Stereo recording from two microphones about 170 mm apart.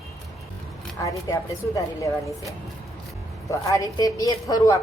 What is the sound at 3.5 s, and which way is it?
A woman's voice, 20° left (ahead or behind).